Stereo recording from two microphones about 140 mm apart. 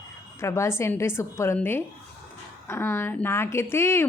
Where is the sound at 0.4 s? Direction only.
20° left (ahead or behind).